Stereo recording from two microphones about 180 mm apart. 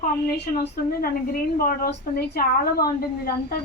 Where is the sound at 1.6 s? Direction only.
55° left (ahead or behind).